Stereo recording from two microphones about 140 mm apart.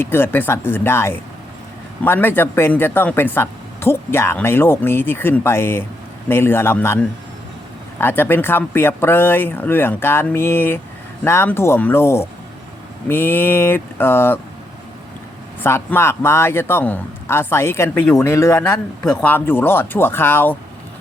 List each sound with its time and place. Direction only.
0.0 s speech: 15° left (ahead or behind)
15.6 s speech: 15° left (ahead or behind)
18.6 s speech: 5° left (ahead or behind)